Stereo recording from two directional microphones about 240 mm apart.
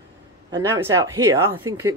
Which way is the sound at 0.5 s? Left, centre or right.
Centre.